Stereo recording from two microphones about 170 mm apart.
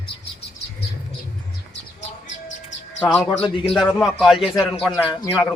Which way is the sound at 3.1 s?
5° left (ahead or behind).